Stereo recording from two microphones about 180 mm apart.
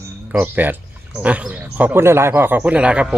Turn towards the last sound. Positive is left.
turn(degrees=-5)  # may be behind; listen again after turning